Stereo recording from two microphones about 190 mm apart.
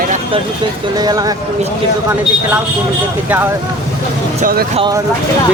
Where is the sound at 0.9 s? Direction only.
20° right (ahead or behind).